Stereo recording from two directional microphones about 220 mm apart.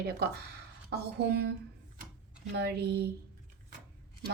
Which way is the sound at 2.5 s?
50° right (ahead or behind).